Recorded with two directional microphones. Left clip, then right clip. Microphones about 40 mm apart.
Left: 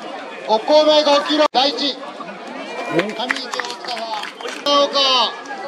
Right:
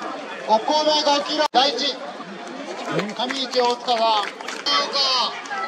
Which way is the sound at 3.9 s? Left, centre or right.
Right.